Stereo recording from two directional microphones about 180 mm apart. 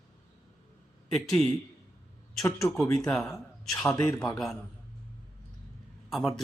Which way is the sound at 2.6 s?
Centre (ahead or behind).